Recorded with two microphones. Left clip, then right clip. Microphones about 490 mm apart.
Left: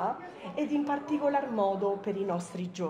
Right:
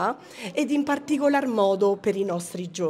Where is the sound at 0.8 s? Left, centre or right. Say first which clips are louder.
Right 6 dB; right.